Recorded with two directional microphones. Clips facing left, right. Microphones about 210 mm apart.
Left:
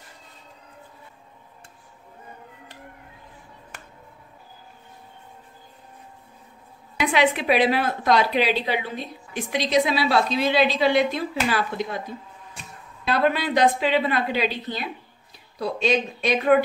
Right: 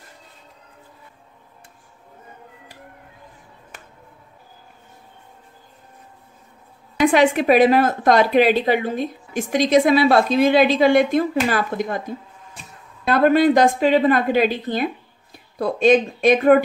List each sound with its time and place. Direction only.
7.0 s speech: 45° right (ahead or behind)
13.0 s a woman's voice: 50° right (ahead or behind)